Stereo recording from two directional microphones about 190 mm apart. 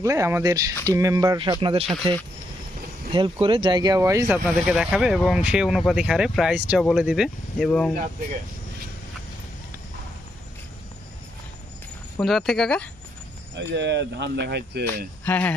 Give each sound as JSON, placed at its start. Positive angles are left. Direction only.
{"t": 0.0, "sound": "speech", "side_deg": -15}
{"t": 1.6, "sound": "speech", "side_deg": -30}
{"t": 3.1, "sound": "speech", "side_deg": -25}
{"t": 4.3, "sound": "speech", "side_deg": -5}
{"t": 12.2, "sound": "speech", "side_deg": 0}
{"t": 13.6, "sound": "speech", "side_deg": -65}
{"t": 15.2, "sound": "speech", "side_deg": 10}